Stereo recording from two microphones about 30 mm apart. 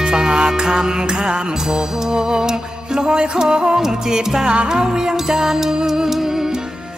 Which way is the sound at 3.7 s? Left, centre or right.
Centre.